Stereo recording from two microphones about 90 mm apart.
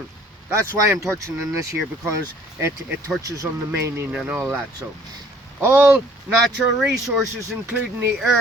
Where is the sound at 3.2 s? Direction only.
40° right (ahead or behind).